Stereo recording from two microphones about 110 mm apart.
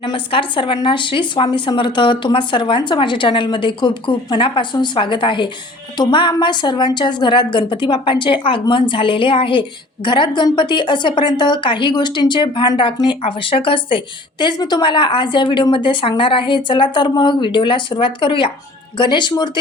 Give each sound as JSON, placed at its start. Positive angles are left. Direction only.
{"t": 0.0, "sound": "a woman's voice", "side_deg": 50}